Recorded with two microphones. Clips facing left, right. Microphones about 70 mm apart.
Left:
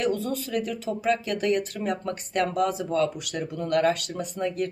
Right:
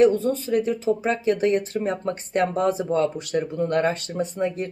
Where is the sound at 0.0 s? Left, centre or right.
Right.